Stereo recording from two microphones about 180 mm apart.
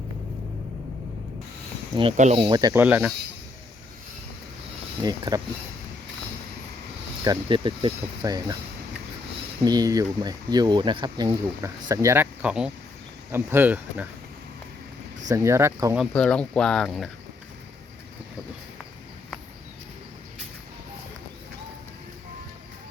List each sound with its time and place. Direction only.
2.1 s speech: 40° right (ahead or behind)
2.4 s speech: 25° right (ahead or behind)
2.7 s speech: 10° right (ahead or behind)
5.0 s speech: 20° right (ahead or behind)
7.3 s speech: 25° right (ahead or behind)
9.6 s speech: 20° right (ahead or behind)
15.3 s speech: 15° right (ahead or behind)
16.1 s speech: 5° left (ahead or behind)